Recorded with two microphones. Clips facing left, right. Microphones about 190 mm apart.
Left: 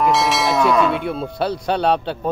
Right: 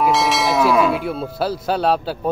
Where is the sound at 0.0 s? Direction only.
Centre (ahead or behind).